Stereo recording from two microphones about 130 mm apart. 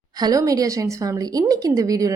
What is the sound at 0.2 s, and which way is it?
A woman's voice, 30° right (ahead or behind).